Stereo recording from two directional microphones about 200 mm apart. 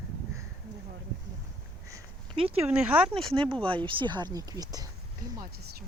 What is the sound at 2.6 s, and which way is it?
Speech, 5° right (ahead or behind).